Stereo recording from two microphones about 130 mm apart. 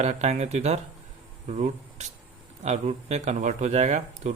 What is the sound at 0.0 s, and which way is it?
Speech, 60° right (ahead or behind).